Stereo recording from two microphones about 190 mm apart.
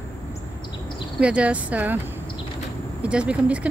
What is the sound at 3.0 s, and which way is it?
Speech, 5° right (ahead or behind).